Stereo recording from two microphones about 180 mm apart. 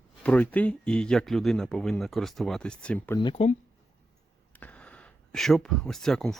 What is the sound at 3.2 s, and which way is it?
Speech, 30° left (ahead or behind).